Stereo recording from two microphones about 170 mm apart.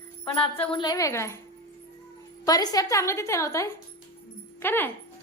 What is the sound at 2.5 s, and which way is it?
A woman's voice, 20° left (ahead or behind).